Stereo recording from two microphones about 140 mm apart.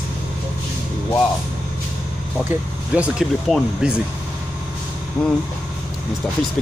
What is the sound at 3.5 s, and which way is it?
Speech, 5° left (ahead or behind).